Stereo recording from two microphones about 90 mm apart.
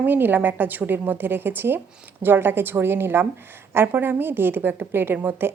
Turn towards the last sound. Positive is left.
turn(degrees=-25)  # may be behind; listen again after turning